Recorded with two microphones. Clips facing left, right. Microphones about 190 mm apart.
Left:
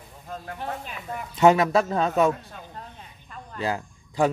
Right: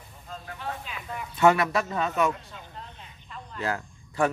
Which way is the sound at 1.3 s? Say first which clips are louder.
Left 3 dB; 20° left (ahead or behind).